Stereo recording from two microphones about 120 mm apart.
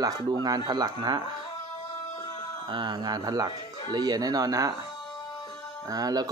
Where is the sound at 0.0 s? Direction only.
35° right (ahead or behind).